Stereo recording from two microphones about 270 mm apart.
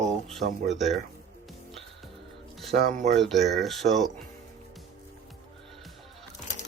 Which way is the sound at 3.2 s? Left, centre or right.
Centre.